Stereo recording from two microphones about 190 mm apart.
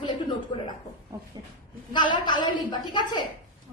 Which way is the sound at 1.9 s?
25° left (ahead or behind).